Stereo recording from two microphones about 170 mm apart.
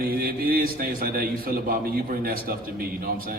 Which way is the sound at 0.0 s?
60° right (ahead or behind).